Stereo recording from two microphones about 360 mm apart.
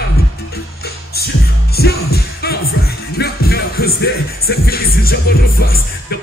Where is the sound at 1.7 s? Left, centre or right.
Left.